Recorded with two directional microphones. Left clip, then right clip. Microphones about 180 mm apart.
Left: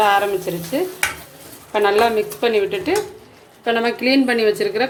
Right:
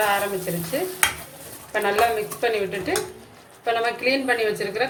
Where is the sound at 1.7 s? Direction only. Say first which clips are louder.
Left 5 dB; 45° left (ahead or behind).